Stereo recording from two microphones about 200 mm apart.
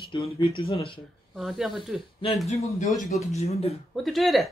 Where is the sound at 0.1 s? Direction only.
25° left (ahead or behind).